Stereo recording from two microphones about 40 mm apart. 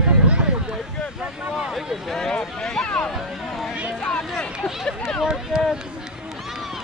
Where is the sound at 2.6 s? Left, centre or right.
Centre.